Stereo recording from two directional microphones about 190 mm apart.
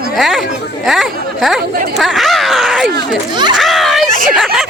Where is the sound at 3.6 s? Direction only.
Centre (ahead or behind).